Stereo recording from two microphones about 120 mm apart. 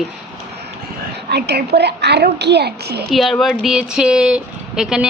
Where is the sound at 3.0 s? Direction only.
Centre (ahead or behind).